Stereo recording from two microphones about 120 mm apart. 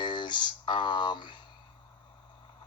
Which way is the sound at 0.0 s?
40° left (ahead or behind).